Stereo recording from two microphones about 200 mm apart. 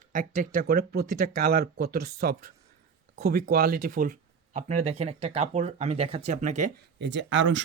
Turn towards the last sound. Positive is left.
turn(degrees=-70)  # may be behind; listen again after turning